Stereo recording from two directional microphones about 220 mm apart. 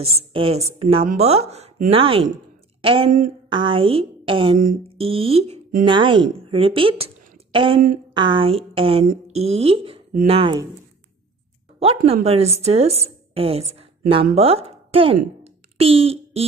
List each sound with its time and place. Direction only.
0.0 s speech: 25° right (ahead or behind)
5.9 s speech: 20° right (ahead or behind)
11.8 s a woman's voice: 25° right (ahead or behind)
15.4 s a sound: 25° right (ahead or behind)